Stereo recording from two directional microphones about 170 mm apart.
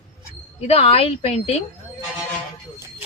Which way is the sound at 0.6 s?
35° left (ahead or behind).